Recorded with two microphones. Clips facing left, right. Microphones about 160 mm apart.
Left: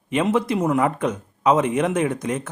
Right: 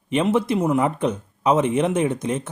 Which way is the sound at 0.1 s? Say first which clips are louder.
Right 1 dB; 20° right (ahead or behind).